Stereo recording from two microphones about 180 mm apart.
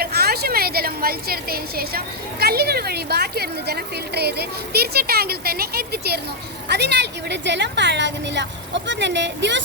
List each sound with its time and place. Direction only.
0.0 s a woman's voice: 60° right (ahead or behind); by 9.6 s 80° right